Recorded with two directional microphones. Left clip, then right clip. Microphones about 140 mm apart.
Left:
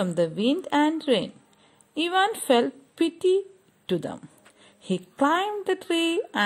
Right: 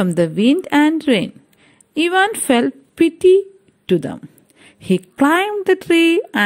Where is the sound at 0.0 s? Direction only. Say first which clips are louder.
Right 8 dB; 35° right (ahead or behind).